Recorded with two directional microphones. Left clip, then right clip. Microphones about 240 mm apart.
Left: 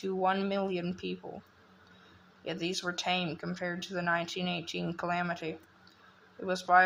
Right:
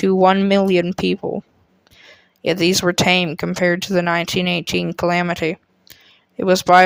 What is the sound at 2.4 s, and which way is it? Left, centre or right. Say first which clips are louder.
Speech: right 18 dB; right.